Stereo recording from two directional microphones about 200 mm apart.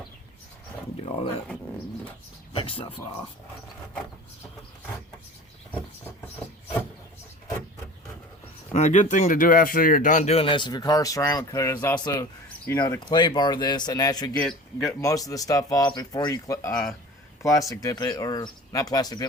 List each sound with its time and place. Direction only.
0.9 s speech: 30° left (ahead or behind)
2.6 s speech: 25° left (ahead or behind)
8.7 s speech: 35° left (ahead or behind); by 14.3 s 20° left (ahead or behind)
14.3 s a man's voice: centre (ahead or behind)
15.0 s speech: 15° left (ahead or behind)